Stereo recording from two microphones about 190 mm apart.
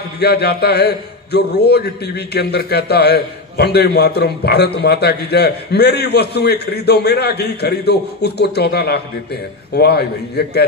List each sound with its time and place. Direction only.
0.2 s a man's voice: 55° left (ahead or behind)